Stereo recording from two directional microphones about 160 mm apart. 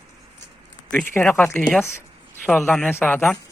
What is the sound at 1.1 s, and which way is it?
Speech, 10° left (ahead or behind).